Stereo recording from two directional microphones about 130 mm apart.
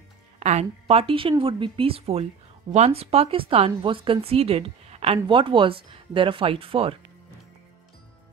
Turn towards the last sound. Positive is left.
turn(degrees=-45)  # may be behind; listen again after turning